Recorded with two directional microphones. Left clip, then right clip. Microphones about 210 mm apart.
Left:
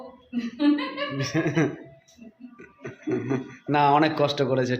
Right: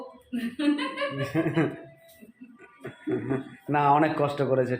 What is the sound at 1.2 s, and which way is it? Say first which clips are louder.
Speech: left 2 dB; 20° left (ahead or behind).